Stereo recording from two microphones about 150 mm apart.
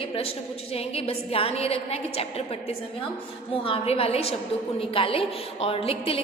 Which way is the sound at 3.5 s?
40° left (ahead or behind).